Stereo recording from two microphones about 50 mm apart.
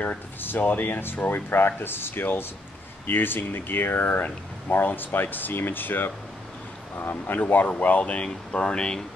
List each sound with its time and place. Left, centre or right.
0.4 s speech: left; by 9.0 s centre